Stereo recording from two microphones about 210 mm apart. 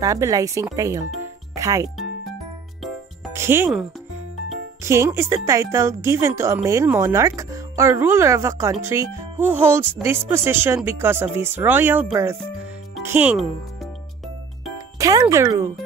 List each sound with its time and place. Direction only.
0.0 s speech: 15° right (ahead or behind)
3.3 s speech: 10° right (ahead or behind)
4.8 s speech: 15° right (ahead or behind)
15.0 s speech: 15° right (ahead or behind)